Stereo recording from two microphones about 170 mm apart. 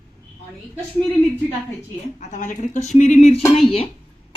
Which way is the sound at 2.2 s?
45° left (ahead or behind).